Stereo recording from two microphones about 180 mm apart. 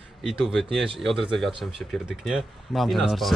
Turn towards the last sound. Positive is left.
turn(degrees=0)  # may be behind; listen again after turning